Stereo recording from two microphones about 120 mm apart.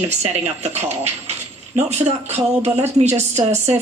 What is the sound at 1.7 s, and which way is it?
A woman's voice, 70° right (ahead or behind).